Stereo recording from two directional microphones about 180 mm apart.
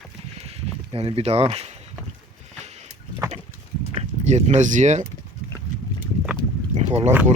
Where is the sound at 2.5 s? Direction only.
40° right (ahead or behind).